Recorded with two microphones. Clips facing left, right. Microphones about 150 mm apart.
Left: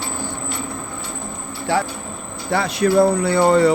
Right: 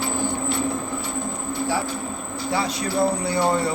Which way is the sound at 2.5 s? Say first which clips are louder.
Left 8 dB; 60° left (ahead or behind).